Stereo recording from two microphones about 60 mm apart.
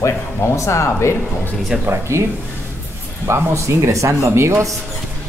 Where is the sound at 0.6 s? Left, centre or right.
Left.